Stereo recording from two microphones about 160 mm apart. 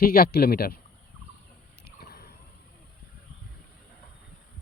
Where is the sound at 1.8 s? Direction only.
70° left (ahead or behind).